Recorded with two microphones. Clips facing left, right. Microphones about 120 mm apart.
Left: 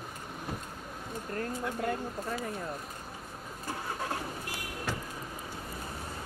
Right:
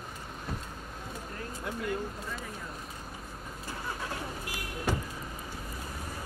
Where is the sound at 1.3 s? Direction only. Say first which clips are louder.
Left 5 dB; 45° left (ahead or behind).